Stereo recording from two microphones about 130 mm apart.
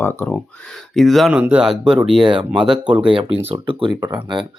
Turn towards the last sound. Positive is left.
turn(degrees=-35)  # may be behind; listen again after turning